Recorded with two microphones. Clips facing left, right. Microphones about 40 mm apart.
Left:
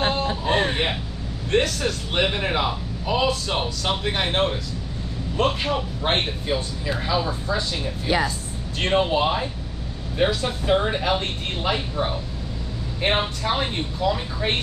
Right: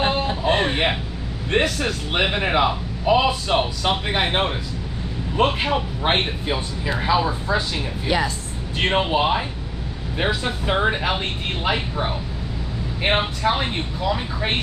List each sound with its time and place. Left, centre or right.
0.1 s a sound: right
1.5 s a man's voice: centre
8.7 s a man's voice: centre